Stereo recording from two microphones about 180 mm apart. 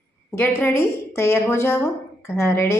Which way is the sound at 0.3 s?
10° left (ahead or behind).